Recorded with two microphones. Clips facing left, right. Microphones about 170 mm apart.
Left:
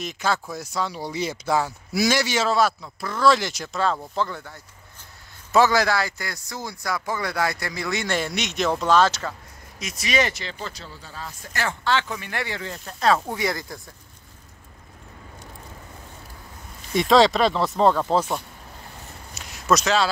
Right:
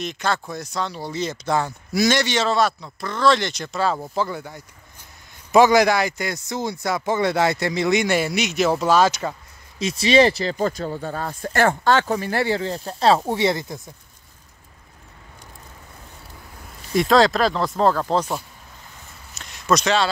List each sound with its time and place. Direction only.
0.0 s a man's voice: 5° left (ahead or behind); by 9.3 s 10° right (ahead or behind)
9.8 s speech: 30° right (ahead or behind)
16.9 s speech: centre (ahead or behind)
19.3 s a sound: 5° left (ahead or behind)